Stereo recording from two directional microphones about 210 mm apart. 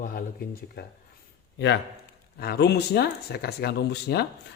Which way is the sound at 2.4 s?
50° left (ahead or behind).